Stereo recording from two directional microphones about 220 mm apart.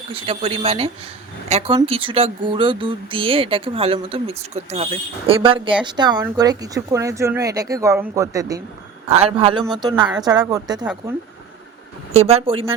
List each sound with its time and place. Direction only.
0.1 s speech: 25° right (ahead or behind)
9.0 s speech: 30° right (ahead or behind)
12.3 s speech: 25° right (ahead or behind)